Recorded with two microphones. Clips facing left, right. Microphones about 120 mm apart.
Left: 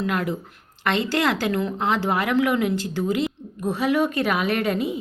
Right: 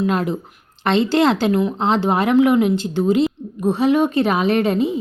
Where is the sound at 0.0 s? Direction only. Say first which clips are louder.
Right 5 dB; 25° right (ahead or behind).